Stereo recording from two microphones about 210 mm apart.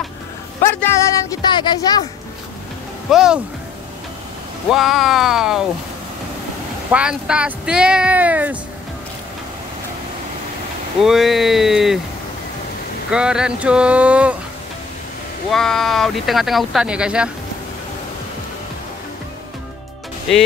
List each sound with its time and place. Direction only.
0.7 s speech: 10° left (ahead or behind)
3.1 s speech: 5° right (ahead or behind)
4.6 s speech: centre (ahead or behind)
6.9 s speech: 5° right (ahead or behind)
11.0 s speech: centre (ahead or behind)
13.1 s speech: 5° right (ahead or behind)
15.5 s speech: centre (ahead or behind)